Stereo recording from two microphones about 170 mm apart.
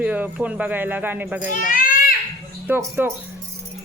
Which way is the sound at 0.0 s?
10° right (ahead or behind).